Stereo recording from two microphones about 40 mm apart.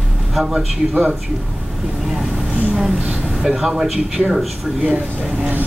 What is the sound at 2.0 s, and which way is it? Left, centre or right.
Speech, centre.